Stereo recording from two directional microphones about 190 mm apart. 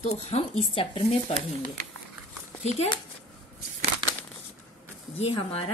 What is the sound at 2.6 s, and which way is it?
Speech, 35° left (ahead or behind).